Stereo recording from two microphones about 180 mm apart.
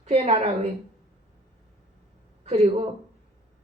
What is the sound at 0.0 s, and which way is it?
Speech, 35° right (ahead or behind).